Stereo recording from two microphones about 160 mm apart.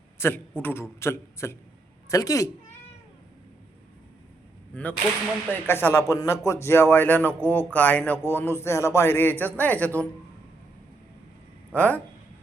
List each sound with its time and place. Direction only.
0.2 s a woman's voice: 10° left (ahead or behind)
4.7 s whip: 10° left (ahead or behind)
5.5 s speech: 15° left (ahead or behind)
11.7 s speech: 10° left (ahead or behind)